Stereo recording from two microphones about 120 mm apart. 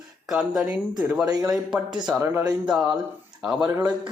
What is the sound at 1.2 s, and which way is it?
Speech, 30° right (ahead or behind).